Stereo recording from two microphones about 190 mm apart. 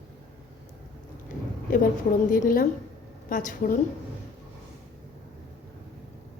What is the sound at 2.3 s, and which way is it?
A woman's voice, 45° left (ahead or behind).